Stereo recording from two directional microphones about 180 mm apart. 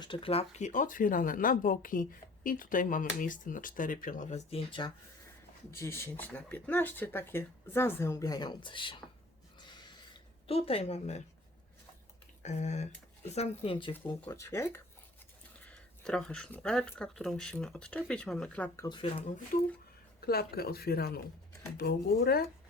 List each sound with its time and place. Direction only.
0.0 s speech: 30° left (ahead or behind)
5.7 s speech: 15° left (ahead or behind)
9.6 s a sound: 25° left (ahead or behind)
10.4 s speech: 35° left (ahead or behind)
12.4 s speech: 40° left (ahead or behind)
14.2 s speech: 15° left (ahead or behind)
15.6 s speech: 5° left (ahead or behind)
18.9 s speech: 30° left (ahead or behind)
19.5 s speech: 50° left (ahead or behind)